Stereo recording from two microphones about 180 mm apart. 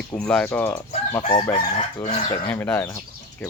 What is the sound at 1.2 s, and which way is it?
Crowing, 30° left (ahead or behind).